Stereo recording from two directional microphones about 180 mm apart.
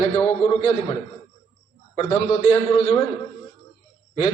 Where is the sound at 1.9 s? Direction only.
35° left (ahead or behind).